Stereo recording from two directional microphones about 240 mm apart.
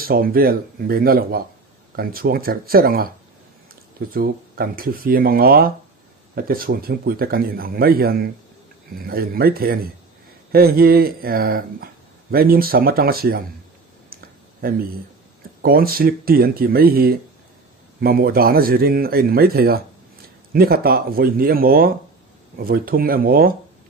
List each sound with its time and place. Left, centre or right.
0.0 s speech: right
4.1 s speech: right
14.1 s a sound: right
15.6 s speech: right